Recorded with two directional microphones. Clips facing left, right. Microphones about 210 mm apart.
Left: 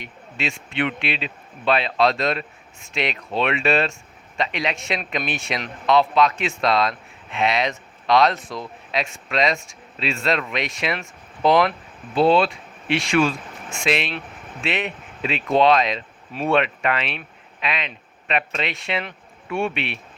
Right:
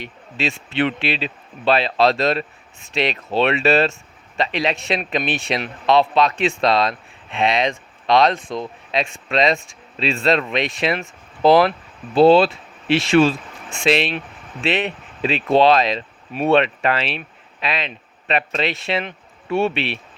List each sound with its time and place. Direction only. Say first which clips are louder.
0.0 s speech: right 4 dB; 35° right (ahead or behind)